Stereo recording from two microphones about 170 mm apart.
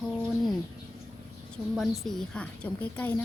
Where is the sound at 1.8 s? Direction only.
Centre (ahead or behind).